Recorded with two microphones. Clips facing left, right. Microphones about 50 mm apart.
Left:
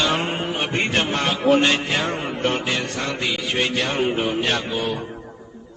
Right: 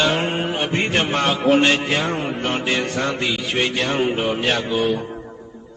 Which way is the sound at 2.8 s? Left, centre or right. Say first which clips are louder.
Right 4 dB; right.